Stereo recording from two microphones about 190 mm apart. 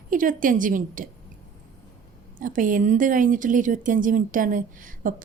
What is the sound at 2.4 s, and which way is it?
Speech, 45° right (ahead or behind).